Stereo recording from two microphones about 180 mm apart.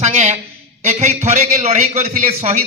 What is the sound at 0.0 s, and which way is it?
A man's voice, 35° right (ahead or behind).